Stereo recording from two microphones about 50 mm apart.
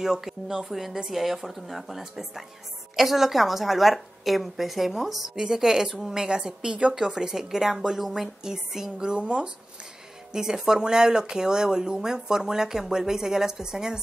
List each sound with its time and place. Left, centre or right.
0.0 s speech: centre
8.9 s speech: centre